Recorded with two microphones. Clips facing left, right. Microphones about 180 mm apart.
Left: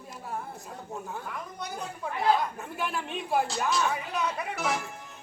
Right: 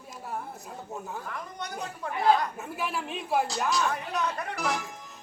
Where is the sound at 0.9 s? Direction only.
Centre (ahead or behind).